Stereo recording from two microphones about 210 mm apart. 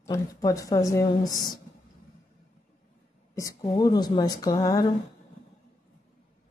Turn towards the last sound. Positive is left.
turn(degrees=20)  # may be behind; listen again after turning